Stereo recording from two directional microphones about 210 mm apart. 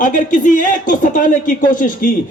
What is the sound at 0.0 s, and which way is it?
A man's voice, 40° left (ahead or behind).